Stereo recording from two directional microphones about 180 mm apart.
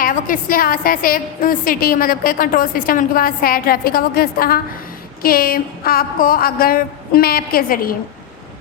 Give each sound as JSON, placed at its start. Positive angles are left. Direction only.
{"t": 0.0, "sound": "a woman's voice", "side_deg": 50}